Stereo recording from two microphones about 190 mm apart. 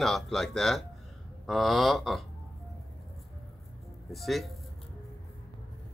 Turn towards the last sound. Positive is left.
turn(degrees=0)  # may be behind; listen again after turning